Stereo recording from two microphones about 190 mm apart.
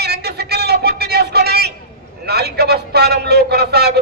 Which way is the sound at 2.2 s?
55° right (ahead or behind).